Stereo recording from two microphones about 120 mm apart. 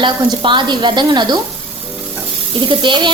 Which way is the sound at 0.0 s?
40° right (ahead or behind).